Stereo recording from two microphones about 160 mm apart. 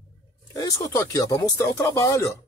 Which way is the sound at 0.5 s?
20° left (ahead or behind).